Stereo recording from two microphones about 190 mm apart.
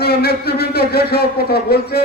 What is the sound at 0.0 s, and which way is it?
Speech, 55° left (ahead or behind).